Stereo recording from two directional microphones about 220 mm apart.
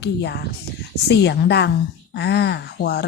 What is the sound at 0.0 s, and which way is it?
Speech, 50° left (ahead or behind).